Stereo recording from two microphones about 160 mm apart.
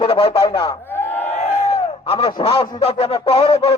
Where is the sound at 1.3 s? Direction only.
40° left (ahead or behind).